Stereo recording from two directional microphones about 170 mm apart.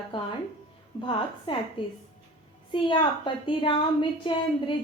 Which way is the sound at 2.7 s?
30° left (ahead or behind).